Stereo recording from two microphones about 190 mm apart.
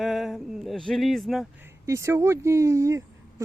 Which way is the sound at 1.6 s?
15° right (ahead or behind).